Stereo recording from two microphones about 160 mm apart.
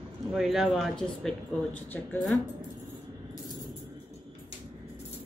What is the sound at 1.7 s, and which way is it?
Speech, 10° left (ahead or behind).